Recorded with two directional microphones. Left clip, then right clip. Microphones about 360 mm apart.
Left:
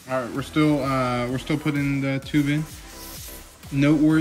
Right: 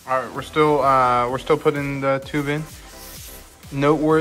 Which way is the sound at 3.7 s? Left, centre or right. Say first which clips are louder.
Right 3 dB; centre.